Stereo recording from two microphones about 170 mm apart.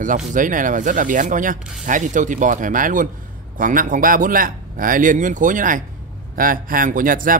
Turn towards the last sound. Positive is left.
turn(degrees=-55)  # may be behind; listen again after turning